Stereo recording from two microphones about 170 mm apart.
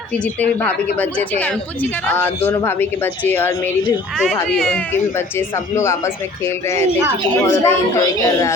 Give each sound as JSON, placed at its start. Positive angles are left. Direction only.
{"t": 0.9, "sound": "speech", "side_deg": 10}
{"t": 5.7, "sound": "speech", "side_deg": 15}